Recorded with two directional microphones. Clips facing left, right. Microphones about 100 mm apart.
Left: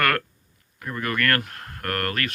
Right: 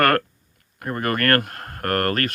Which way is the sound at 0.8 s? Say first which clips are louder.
Right 3 dB; 45° right (ahead or behind).